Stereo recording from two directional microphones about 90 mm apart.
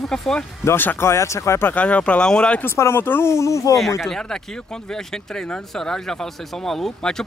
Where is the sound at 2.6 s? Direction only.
30° left (ahead or behind).